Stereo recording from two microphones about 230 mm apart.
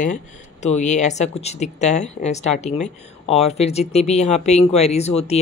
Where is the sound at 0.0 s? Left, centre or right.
Left.